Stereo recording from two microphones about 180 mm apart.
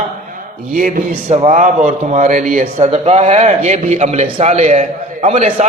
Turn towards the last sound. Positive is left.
turn(degrees=-35)  # may be behind; listen again after turning